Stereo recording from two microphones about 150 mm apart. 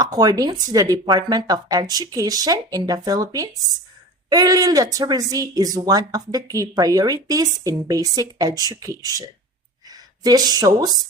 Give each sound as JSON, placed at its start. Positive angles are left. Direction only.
{"t": 0.0, "sound": "speech", "side_deg": -25}
{"t": 10.2, "sound": "speech", "side_deg": -25}